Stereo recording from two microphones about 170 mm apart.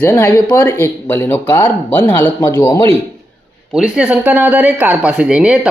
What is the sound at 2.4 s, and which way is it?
Speech, 20° left (ahead or behind).